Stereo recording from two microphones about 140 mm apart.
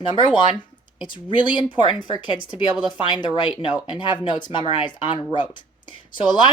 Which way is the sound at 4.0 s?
35° left (ahead or behind).